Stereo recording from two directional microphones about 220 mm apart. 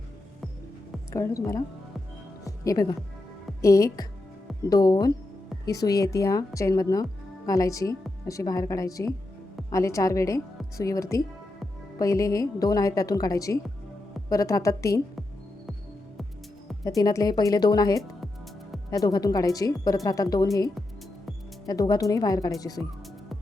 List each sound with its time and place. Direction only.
1.1 s speech: 15° left (ahead or behind)
2.6 s speech: 15° left (ahead or behind)
16.8 s speech: 15° left (ahead or behind)
21.7 s speech: 15° left (ahead or behind)